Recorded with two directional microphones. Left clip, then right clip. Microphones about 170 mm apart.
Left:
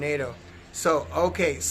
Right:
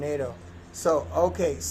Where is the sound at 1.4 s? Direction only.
10° left (ahead or behind).